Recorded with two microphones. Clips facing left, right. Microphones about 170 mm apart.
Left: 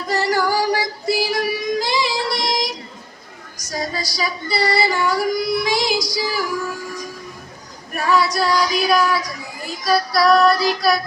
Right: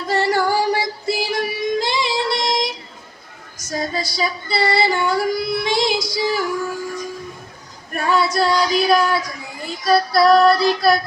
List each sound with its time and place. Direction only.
0.1 s child singing: 25° right (ahead or behind)
3.6 s female singing: 25° right (ahead or behind)
7.9 s child singing: 25° right (ahead or behind)